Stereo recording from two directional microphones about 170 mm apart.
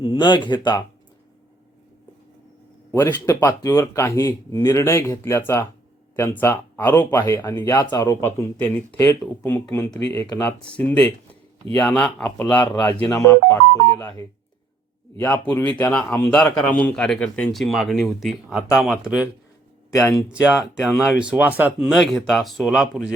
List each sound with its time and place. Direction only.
0.0 s speech: 25° left (ahead or behind)
2.9 s speech: 15° left (ahead or behind)
15.2 s a man's voice: 10° left (ahead or behind); by 19.3 s 5° right (ahead or behind)
19.9 s speech: 20° left (ahead or behind)
20.3 s a man's voice: 5° right (ahead or behind)